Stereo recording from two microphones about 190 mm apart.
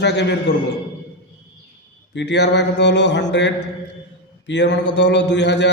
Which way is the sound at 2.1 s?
65° left (ahead or behind).